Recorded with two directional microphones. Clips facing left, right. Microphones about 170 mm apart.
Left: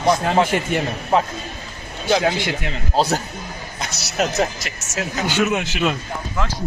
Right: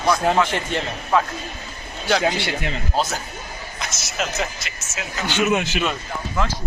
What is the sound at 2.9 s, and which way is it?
A man's voice, 35° left (ahead or behind).